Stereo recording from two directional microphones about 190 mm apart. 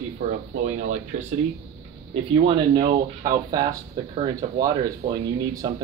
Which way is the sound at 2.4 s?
30° right (ahead or behind).